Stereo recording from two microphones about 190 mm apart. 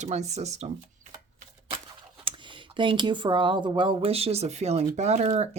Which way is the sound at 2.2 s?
25° right (ahead or behind).